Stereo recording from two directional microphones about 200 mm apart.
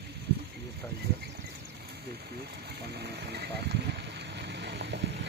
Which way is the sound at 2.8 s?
55° right (ahead or behind).